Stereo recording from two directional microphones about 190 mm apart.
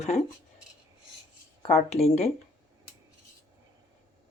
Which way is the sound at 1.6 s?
30° left (ahead or behind).